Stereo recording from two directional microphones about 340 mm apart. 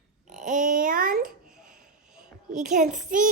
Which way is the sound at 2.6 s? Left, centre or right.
Right.